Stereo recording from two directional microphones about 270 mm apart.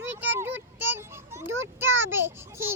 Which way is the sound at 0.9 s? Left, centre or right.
Centre.